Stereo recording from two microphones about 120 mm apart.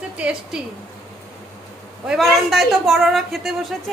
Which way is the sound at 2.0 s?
5° right (ahead or behind).